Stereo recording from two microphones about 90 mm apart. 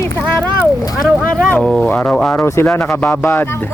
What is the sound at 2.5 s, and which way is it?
Speech, 25° left (ahead or behind).